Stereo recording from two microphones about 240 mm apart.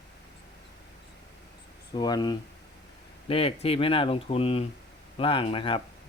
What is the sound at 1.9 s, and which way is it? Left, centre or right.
Speech, centre.